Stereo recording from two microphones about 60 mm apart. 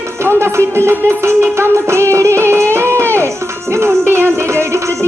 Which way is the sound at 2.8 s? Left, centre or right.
Right.